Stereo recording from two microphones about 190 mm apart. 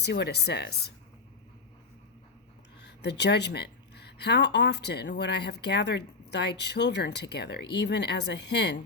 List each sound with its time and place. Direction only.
0.0 s speech: 60° left (ahead or behind)
2.8 s speech: 65° left (ahead or behind)